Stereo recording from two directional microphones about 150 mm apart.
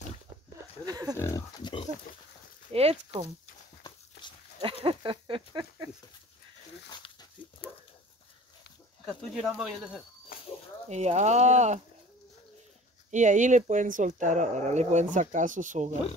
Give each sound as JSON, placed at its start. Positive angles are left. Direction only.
{"t": 0.8, "sound": "pig", "side_deg": -25}
{"t": 1.1, "sound": "pig", "side_deg": 20}
{"t": 1.6, "sound": "pig", "side_deg": 35}
{"t": 2.7, "sound": "speech", "side_deg": -40}
{"t": 4.8, "sound": "speech", "side_deg": -35}
{"t": 6.9, "sound": "dog", "side_deg": 30}
{"t": 9.0, "sound": "speech", "side_deg": 0}
{"t": 10.9, "sound": "speech", "side_deg": -50}
{"t": 13.1, "sound": "speech", "side_deg": -55}